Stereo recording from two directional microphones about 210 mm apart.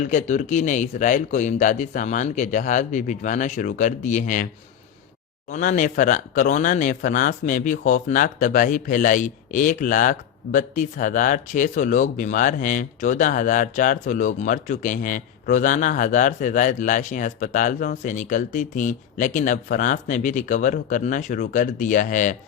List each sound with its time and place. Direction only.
0.0 s speech: 35° left (ahead or behind)
5.5 s speech: 35° left (ahead or behind)